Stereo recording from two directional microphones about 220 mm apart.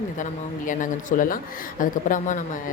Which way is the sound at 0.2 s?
35° left (ahead or behind).